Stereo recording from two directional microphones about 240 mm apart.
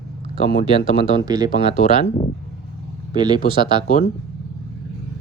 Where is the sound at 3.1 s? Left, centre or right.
Centre.